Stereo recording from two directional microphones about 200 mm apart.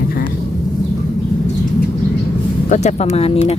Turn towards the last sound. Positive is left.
turn(degrees=30)  # may be behind; listen again after turning